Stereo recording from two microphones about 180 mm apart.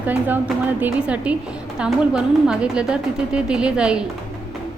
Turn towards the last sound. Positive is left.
turn(degrees=-5)  # may be behind; listen again after turning